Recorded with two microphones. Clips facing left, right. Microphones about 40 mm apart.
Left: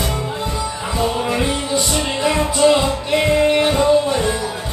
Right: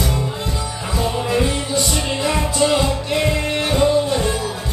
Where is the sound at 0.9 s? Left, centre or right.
Left.